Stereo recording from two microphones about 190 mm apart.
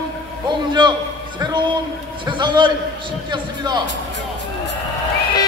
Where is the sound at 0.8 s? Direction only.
25° right (ahead or behind).